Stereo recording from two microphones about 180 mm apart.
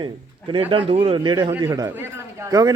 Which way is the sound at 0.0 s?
30° right (ahead or behind).